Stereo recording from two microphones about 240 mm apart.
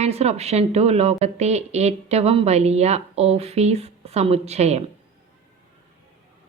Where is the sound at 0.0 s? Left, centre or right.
Right.